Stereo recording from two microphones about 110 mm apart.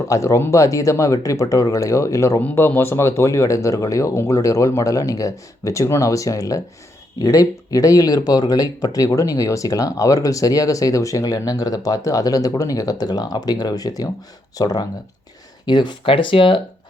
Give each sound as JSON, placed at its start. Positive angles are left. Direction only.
{"t": 0.1, "sound": "speech", "side_deg": 30}
{"t": 2.4, "sound": "speech", "side_deg": 15}